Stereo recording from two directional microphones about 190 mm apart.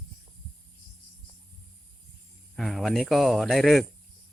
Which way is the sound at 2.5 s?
Centre (ahead or behind).